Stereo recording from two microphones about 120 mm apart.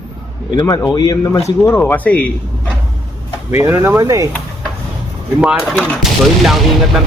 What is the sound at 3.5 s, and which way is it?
Speech, 25° right (ahead or behind).